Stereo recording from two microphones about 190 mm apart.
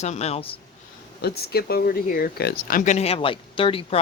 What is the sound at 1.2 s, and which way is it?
Speech, 55° left (ahead or behind).